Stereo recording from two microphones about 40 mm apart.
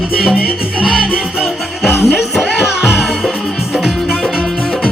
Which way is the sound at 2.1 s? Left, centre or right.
Centre.